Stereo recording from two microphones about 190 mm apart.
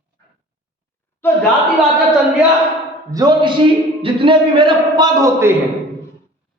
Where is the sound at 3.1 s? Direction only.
20° right (ahead or behind).